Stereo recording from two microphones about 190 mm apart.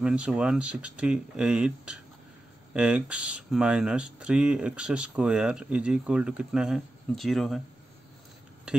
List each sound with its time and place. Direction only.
0.0 s speech: 5° right (ahead or behind)
8.7 s speech: 5° right (ahead or behind)